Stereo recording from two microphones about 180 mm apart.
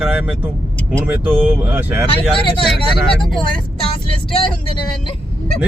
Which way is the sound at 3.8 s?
30° left (ahead or behind).